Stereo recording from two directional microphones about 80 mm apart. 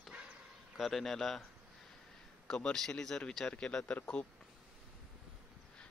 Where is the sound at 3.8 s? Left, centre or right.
Left.